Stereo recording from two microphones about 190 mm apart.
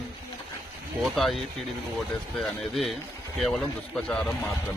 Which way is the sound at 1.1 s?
Centre (ahead or behind).